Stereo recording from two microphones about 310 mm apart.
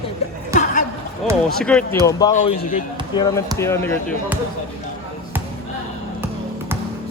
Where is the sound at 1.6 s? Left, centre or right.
Centre.